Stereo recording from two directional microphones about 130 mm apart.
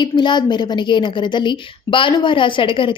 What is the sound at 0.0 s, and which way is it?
A woman's voice, 35° left (ahead or behind).